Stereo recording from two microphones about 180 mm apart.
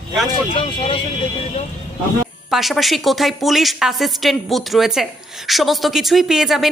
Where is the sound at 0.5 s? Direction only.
30° left (ahead or behind).